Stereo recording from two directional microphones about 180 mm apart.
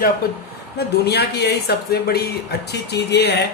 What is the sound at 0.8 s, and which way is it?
Speech, 65° left (ahead or behind).